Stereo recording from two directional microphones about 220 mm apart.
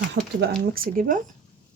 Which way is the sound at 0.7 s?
40° right (ahead or behind).